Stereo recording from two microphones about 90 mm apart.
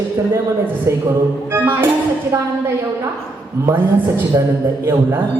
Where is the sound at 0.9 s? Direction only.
30° right (ahead or behind).